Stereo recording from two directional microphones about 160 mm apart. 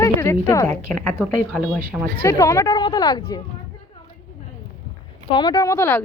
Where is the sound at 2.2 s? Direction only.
20° left (ahead or behind).